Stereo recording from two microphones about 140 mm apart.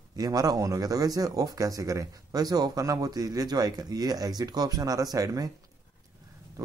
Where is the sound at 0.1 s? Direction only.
25° right (ahead or behind).